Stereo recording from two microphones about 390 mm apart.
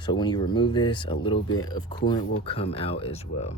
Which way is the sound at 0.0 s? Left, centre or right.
Centre.